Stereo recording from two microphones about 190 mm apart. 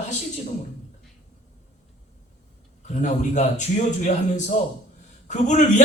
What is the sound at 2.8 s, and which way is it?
A man's voice, 40° left (ahead or behind).